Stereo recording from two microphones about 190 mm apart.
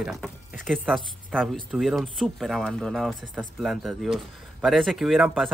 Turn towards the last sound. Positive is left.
turn(degrees=0)  # may be behind; listen again after turning